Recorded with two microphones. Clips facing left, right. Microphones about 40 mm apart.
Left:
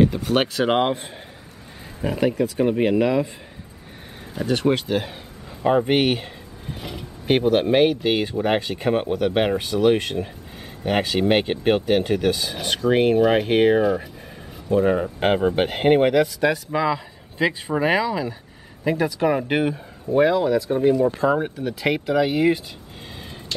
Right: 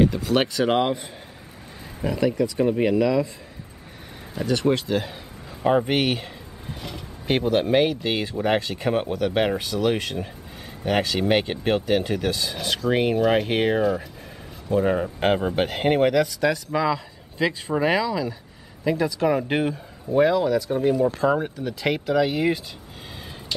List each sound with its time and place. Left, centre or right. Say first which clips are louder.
0.2 s speech: left 1 dB; centre
2.2 s speech: left 1 dB; left
4.5 s speech: left 1 dB; centre
5.6 s speech: left 2 dB; centre